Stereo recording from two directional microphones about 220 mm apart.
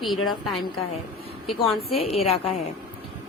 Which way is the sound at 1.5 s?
25° left (ahead or behind).